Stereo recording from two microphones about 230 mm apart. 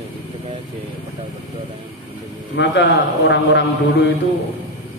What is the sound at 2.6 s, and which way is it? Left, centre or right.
Speech, left.